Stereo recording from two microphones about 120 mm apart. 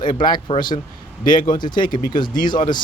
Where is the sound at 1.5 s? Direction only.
40° left (ahead or behind).